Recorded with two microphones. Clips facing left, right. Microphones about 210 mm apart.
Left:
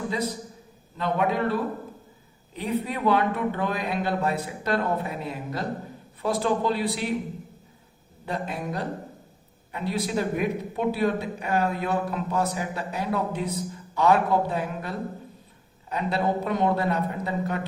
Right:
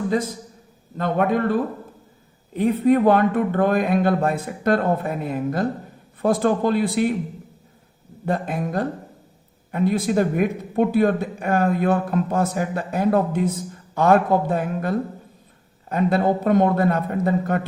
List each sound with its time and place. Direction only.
0.9 s a man's voice: 50° right (ahead or behind)
8.2 s a man's voice: 50° right (ahead or behind)